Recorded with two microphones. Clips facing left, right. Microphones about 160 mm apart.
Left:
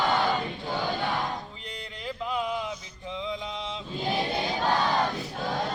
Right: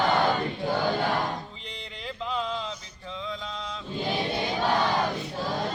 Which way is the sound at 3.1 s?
20° left (ahead or behind).